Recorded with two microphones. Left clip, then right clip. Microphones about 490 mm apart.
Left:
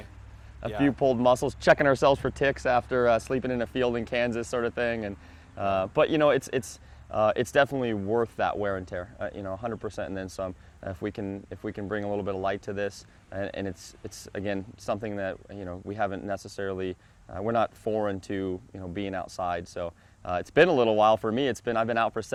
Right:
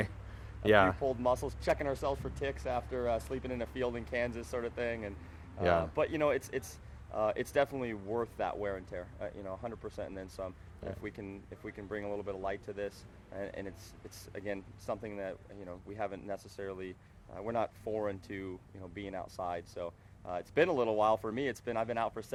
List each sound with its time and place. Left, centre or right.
0.9 s speech: left